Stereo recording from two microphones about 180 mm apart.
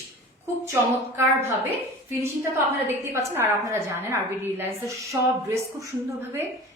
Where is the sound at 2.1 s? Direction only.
15° right (ahead or behind).